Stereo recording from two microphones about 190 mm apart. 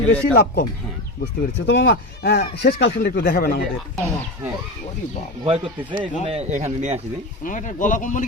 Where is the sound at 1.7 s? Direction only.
65° left (ahead or behind).